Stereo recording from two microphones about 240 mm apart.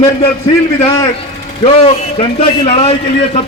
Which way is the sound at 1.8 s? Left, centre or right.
Left.